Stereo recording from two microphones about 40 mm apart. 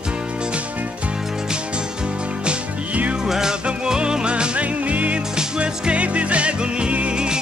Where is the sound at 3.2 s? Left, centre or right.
Centre.